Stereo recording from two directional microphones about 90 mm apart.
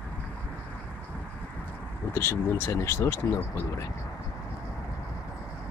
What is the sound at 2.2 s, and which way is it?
Speech, 30° left (ahead or behind).